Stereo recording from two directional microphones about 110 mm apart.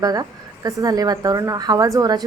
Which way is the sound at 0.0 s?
35° right (ahead or behind).